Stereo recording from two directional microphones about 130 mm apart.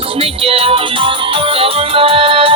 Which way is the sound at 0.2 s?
45° right (ahead or behind).